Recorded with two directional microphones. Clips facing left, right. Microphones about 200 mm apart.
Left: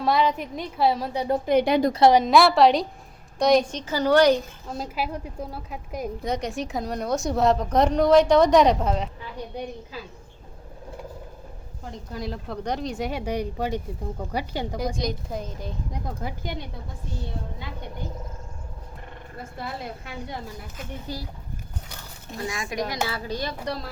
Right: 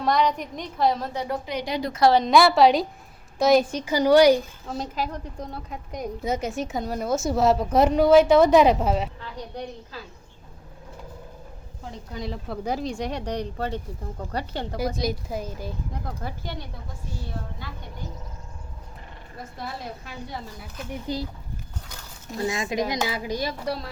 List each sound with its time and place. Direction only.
0.0 s a woman's voice: 5° left (ahead or behind)
1.5 s speech: 55° left (ahead or behind)
1.9 s a woman's voice: 25° left (ahead or behind)
2.1 s a woman's voice: centre (ahead or behind)
4.8 s a woman's voice: 10° left (ahead or behind)
9.2 s a woman's voice: 10° left (ahead or behind)
11.9 s a woman's voice: centre (ahead or behind)
14.9 s a woman's voice: 5° right (ahead or behind)
15.9 s a woman's voice: 15° left (ahead or behind)
21.1 s speech: 20° right (ahead or behind)
22.4 s a woman's voice: 25° right (ahead or behind); by 23.9 s centre (ahead or behind)